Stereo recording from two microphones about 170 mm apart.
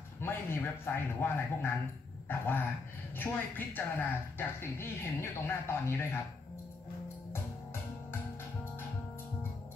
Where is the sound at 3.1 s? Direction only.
10° left (ahead or behind).